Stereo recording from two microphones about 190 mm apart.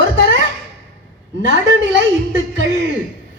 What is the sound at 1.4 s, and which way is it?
Speech, 75° right (ahead or behind).